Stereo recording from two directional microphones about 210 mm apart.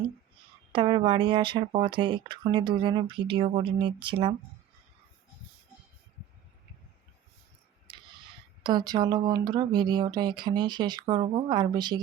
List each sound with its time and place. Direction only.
0.7 s speech: 25° right (ahead or behind)
7.9 s speech: 20° right (ahead or behind)